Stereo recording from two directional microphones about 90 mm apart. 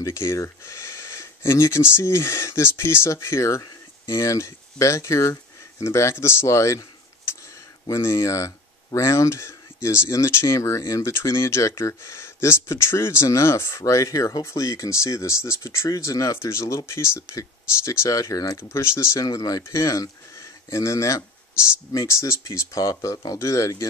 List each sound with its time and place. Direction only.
0.0 s speech: 30° left (ahead or behind)
7.9 s speech: 30° left (ahead or behind)
18.6 s speech: 30° left (ahead or behind)